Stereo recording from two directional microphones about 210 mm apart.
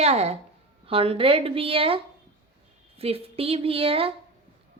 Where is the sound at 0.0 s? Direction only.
30° right (ahead or behind).